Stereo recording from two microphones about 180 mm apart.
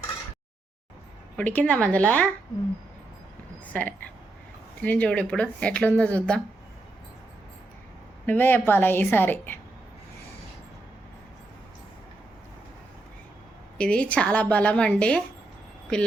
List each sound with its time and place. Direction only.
1.4 s speech: 10° left (ahead or behind)
3.7 s speech: 10° left (ahead or behind)
8.3 s speech: 10° left (ahead or behind)
13.7 s speech: 5° left (ahead or behind)